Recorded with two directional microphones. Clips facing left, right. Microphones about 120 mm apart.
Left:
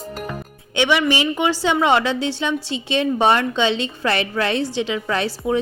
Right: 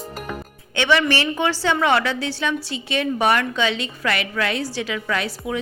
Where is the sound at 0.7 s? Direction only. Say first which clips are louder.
Left 1 dB; 15° left (ahead or behind).